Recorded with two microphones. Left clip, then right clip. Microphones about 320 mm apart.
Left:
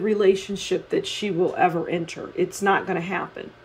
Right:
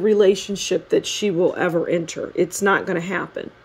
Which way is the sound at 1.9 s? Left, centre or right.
Right.